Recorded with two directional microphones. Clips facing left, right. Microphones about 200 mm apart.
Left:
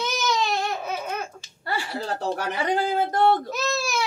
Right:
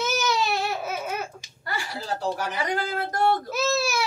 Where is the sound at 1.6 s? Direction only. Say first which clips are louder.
Left 4 dB; 30° left (ahead or behind).